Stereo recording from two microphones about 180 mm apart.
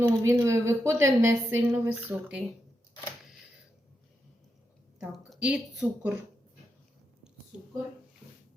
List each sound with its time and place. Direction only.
0.0 s speech: 15° right (ahead or behind)
4.9 s a woman's voice: 5° right (ahead or behind)